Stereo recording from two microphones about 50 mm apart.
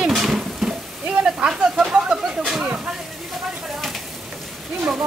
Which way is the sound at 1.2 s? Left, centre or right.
Centre.